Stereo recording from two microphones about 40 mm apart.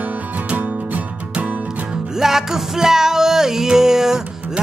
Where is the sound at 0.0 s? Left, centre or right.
Right.